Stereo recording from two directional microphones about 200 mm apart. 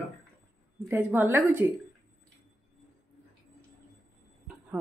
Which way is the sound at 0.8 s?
10° right (ahead or behind).